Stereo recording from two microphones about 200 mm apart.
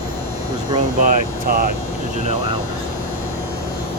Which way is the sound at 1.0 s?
40° right (ahead or behind).